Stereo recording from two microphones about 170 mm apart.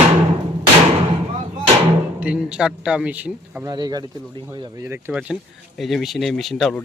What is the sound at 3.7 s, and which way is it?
Speech, 25° right (ahead or behind).